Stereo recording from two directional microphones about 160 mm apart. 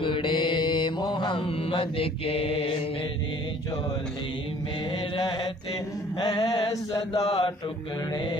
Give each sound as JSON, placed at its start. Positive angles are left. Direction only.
{"t": 0.0, "sound": "mantra", "side_deg": 30}
{"t": 6.1, "sound": "chant", "side_deg": 25}
{"t": 7.2, "sound": "mantra", "side_deg": 35}